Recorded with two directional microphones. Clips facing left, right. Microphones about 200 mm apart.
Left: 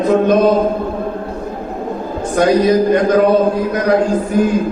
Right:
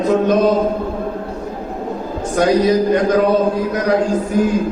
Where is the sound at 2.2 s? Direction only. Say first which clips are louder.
Left 2 dB; 55° left (ahead or behind).